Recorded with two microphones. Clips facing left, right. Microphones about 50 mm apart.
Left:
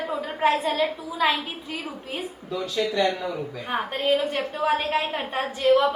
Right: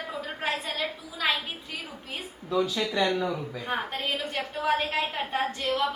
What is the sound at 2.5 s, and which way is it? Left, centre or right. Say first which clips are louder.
Speech: left 1 dB; centre.